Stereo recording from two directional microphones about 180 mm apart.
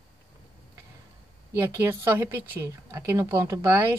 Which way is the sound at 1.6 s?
15° right (ahead or behind).